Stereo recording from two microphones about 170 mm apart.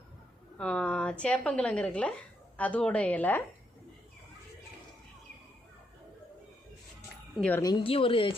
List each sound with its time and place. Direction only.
0.6 s a woman's voice: 5° left (ahead or behind)
7.3 s speech: 5° left (ahead or behind)
7.6 s speech: 30° left (ahead or behind)